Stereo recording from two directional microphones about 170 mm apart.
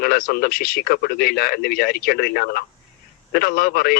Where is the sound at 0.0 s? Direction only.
60° left (ahead or behind).